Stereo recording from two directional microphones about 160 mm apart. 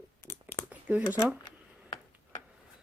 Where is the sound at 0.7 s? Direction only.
10° right (ahead or behind).